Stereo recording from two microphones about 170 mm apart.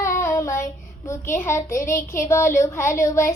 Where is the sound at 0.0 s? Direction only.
15° left (ahead or behind).